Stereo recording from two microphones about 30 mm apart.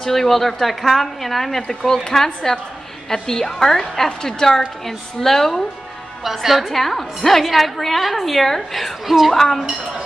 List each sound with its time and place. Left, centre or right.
0.0 s a woman's voice: centre
6.2 s a woman's voice: centre
6.7 s a woman's voice: centre
9.3 s a woman's voice: centre